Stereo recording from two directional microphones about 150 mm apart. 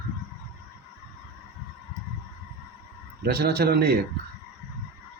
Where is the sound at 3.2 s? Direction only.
90° right.